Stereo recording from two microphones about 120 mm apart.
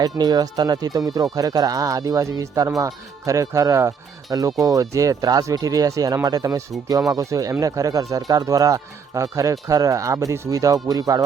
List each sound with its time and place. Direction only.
0.0 s speech: 35° right (ahead or behind)